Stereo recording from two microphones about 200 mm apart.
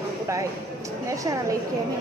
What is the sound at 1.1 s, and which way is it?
Speech, 15° right (ahead or behind).